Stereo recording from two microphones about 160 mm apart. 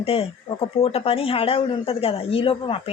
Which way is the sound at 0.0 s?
35° left (ahead or behind).